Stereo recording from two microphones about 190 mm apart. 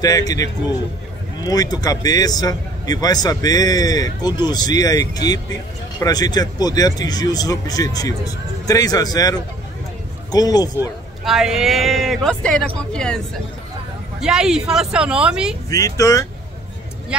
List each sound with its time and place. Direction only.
0.0 s a man's voice: 20° left (ahead or behind)
11.2 s speech: 5° right (ahead or behind)
14.2 s speech: 5° right (ahead or behind)
15.7 s speech: 15° left (ahead or behind)